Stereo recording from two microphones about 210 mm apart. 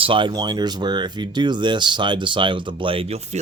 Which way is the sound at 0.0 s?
25° right (ahead or behind).